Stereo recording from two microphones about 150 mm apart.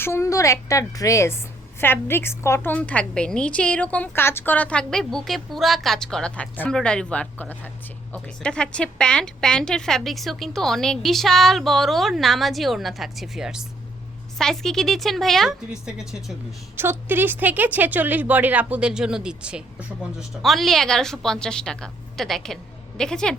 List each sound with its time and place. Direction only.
0.0 s a woman's voice: 20° left (ahead or behind); by 16.3 s 5° right (ahead or behind)
16.7 s a woman's voice: 15° right (ahead or behind); by 23.3 s 5° left (ahead or behind)